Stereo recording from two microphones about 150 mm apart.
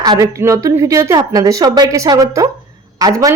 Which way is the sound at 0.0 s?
25° right (ahead or behind).